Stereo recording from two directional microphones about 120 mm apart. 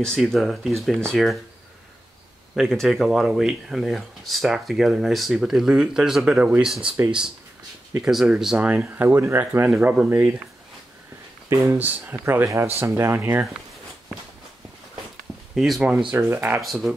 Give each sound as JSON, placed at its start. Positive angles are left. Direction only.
{"t": 0.0, "sound": "speech", "side_deg": 5}
{"t": 2.5, "sound": "speech", "side_deg": 5}
{"t": 8.0, "sound": "speech", "side_deg": -5}
{"t": 9.7, "sound": "speech", "side_deg": -5}
{"t": 10.0, "sound": "speech", "side_deg": -20}
{"t": 11.4, "sound": "speech", "side_deg": -25}
{"t": 15.5, "sound": "speech", "side_deg": 0}
{"t": 16.1, "sound": "speech", "side_deg": -20}
{"t": 16.6, "sound": "speech", "side_deg": 0}